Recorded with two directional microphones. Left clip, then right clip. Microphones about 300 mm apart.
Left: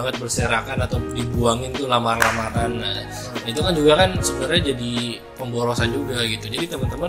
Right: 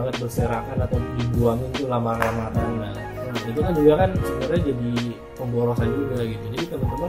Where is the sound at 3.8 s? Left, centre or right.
Centre.